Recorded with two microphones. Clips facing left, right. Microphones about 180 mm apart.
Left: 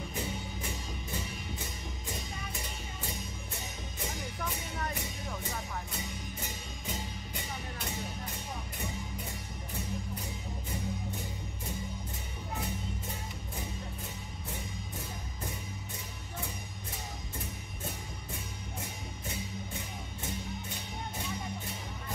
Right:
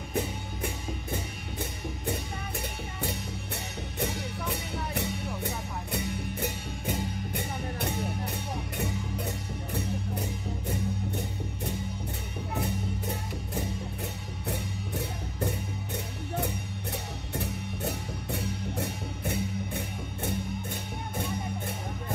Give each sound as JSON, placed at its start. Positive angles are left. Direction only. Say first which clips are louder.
{"t": 2.0, "sound": "music", "louder": "right 8 dB", "side_deg": -65}
{"t": 14.5, "sound": "music", "louder": "right 8 dB", "side_deg": -70}